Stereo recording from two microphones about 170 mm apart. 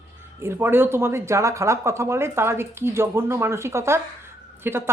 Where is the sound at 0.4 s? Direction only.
15° right (ahead or behind).